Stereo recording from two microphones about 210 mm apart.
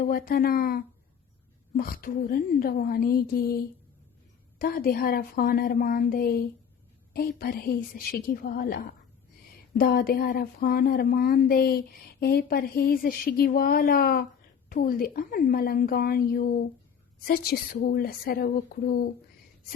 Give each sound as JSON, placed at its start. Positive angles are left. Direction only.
{"t": 0.0, "sound": "speech", "side_deg": 45}